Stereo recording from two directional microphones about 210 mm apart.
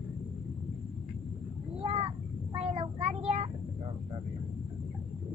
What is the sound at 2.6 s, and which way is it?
Child singing, 30° right (ahead or behind).